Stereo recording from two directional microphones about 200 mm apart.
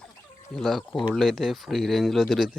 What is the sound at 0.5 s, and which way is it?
Speech, centre (ahead or behind).